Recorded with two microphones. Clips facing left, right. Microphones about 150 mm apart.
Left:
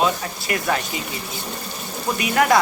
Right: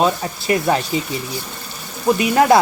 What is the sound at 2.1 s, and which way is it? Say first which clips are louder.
Speech: right 4 dB; 25° right (ahead or behind).